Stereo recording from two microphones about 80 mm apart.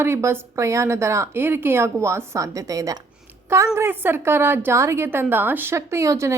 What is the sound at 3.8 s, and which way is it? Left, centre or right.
A woman's voice, right.